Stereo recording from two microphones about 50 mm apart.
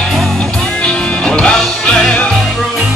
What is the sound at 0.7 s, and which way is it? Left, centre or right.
Music, left.